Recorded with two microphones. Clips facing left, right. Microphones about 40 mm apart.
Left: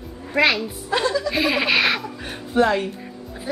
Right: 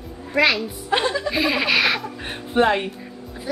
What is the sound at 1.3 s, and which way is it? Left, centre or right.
Laughter, centre.